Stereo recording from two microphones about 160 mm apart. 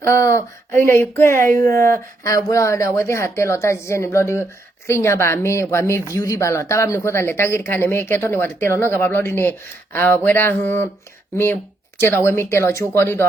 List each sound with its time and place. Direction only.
0.0 s speech: 20° left (ahead or behind)
12.0 s speech: 15° left (ahead or behind)